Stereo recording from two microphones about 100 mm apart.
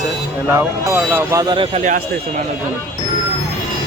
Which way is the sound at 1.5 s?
60° right (ahead or behind).